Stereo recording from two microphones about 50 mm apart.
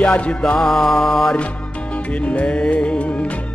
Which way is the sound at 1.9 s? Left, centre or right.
Left.